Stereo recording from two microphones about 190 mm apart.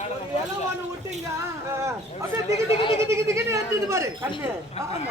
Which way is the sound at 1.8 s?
15° right (ahead or behind).